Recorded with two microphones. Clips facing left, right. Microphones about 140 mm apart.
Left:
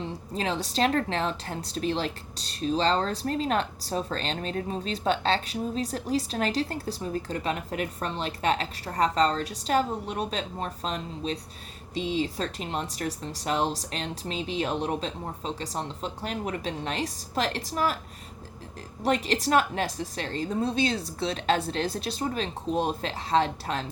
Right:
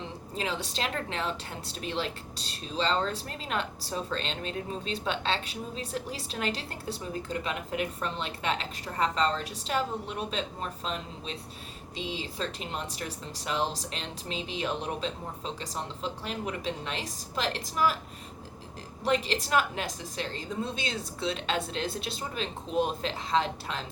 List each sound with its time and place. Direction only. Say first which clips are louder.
0.3 s speech: left 5 dB; 40° left (ahead or behind)
19.0 s speech: left 3 dB; 40° left (ahead or behind)